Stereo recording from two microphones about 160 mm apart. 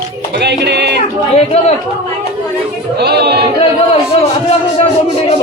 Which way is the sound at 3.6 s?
40° left (ahead or behind).